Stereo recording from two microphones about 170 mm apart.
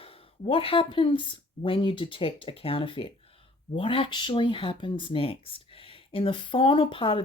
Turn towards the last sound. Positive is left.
turn(degrees=30)  # may be behind; listen again after turning